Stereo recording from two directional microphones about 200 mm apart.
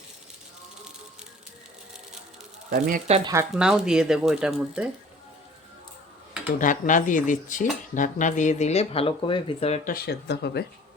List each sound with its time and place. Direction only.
2.6 s speech: 45° right (ahead or behind)
3.5 s speech: 5° right (ahead or behind)
6.6 s speech: 40° left (ahead or behind)
9.9 s speech: 55° left (ahead or behind)